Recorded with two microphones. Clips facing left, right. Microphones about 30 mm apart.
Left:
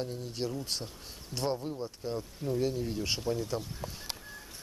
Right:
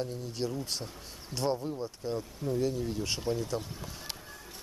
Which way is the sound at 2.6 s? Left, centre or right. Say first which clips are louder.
Even; centre.